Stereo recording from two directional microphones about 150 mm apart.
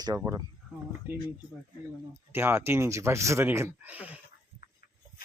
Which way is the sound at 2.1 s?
15° right (ahead or behind).